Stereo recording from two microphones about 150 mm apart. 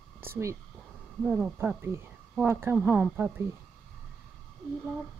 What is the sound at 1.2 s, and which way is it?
Speech, 15° right (ahead or behind).